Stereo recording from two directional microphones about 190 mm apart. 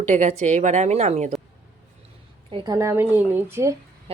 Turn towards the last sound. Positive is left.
turn(degrees=-30)  # may be behind; listen again after turning